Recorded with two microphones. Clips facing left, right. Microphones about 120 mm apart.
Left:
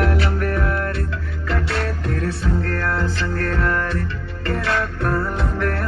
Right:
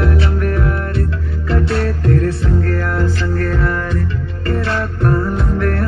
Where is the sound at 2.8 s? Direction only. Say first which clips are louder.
Right 4 dB; 15° right (ahead or behind).